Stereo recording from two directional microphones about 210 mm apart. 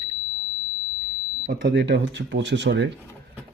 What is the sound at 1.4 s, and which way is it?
Speech, 50° right (ahead or behind).